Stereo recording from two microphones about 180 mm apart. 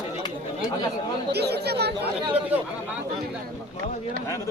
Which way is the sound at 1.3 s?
65° right (ahead or behind).